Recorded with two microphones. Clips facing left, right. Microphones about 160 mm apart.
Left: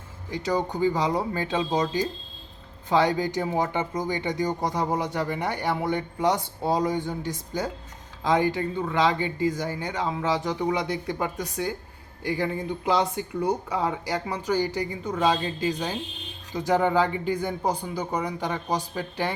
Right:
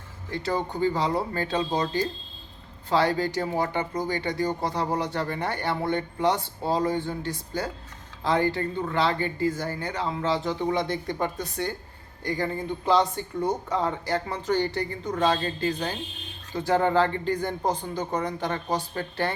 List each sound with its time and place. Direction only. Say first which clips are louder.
0.3 s speech: left 2 dB; 15° left (ahead or behind)